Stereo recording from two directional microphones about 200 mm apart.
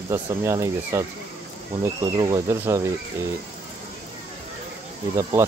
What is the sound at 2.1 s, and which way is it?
Speech, 15° right (ahead or behind).